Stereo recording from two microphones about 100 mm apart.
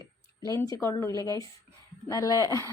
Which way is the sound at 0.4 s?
35° left (ahead or behind).